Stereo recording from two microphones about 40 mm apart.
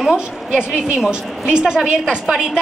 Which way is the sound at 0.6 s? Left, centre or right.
Centre.